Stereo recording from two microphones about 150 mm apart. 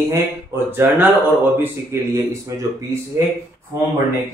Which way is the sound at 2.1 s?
20° right (ahead or behind).